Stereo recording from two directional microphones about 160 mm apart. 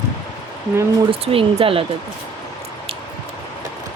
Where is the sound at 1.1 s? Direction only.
35° right (ahead or behind).